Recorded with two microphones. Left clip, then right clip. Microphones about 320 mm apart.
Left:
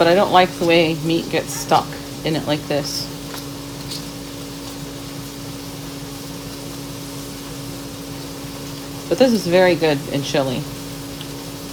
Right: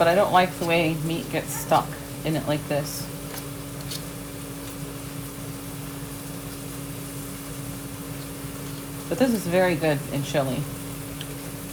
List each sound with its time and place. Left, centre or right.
0.0 s speech: left
9.1 s speech: left